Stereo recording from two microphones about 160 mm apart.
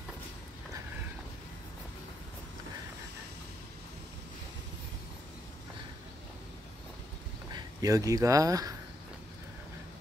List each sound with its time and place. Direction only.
7.5 s speech: 20° right (ahead or behind)